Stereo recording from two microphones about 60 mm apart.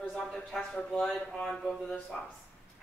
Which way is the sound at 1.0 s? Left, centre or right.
Centre.